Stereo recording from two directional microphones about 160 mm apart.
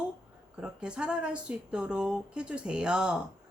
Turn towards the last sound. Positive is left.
turn(degrees=-5)  # may be behind; listen again after turning